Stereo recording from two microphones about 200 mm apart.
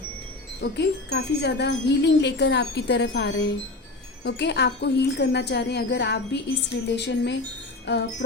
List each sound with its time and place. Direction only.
0.6 s speech: 55° left (ahead or behind)